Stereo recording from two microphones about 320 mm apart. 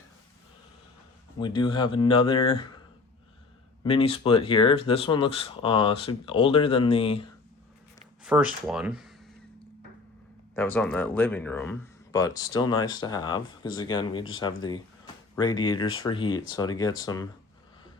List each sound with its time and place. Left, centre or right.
1.4 s speech: centre
3.8 s speech: centre
8.2 s speech: centre
10.5 s speech: centre